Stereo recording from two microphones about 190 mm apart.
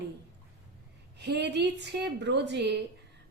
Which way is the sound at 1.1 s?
60° right (ahead or behind).